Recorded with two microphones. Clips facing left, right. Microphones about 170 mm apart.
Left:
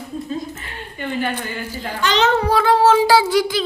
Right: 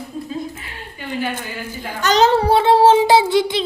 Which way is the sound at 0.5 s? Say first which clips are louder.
Left 2 dB; 5° right (ahead or behind).